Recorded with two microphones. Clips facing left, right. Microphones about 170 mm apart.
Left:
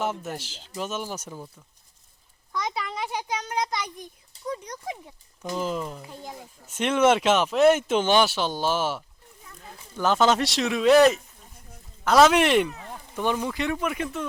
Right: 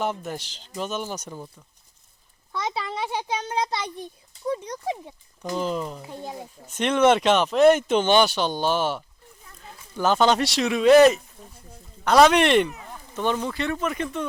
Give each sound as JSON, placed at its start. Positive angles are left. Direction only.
{"t": 0.0, "sound": "speech", "side_deg": 5}
{"t": 2.5, "sound": "a child's voice", "side_deg": -25}
{"t": 5.5, "sound": "speech", "side_deg": 5}
{"t": 6.0, "sound": "a child's voice", "side_deg": -25}
{"t": 6.7, "sound": "speech", "side_deg": 5}